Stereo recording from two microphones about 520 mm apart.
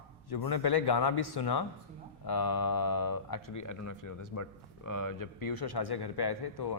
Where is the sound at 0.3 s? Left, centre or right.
Left.